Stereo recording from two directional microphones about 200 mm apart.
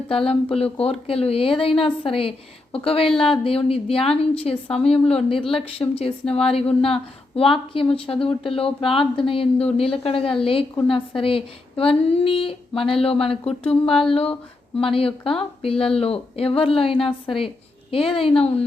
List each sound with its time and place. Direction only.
0.1 s a woman's voice: 25° left (ahead or behind)